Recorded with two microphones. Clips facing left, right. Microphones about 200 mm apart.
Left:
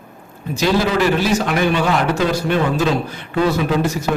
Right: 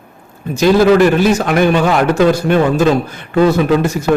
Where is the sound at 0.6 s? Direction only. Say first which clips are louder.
Right 8 dB; 50° right (ahead or behind).